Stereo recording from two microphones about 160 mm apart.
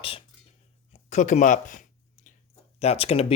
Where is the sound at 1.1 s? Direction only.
45° left (ahead or behind).